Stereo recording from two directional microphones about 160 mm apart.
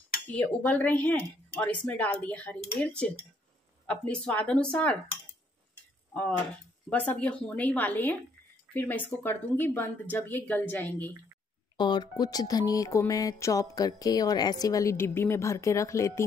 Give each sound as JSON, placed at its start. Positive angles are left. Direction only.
{"t": 0.3, "sound": "speech", "side_deg": 10}
{"t": 6.1, "sound": "speech", "side_deg": 5}
{"t": 11.7, "sound": "speech", "side_deg": 30}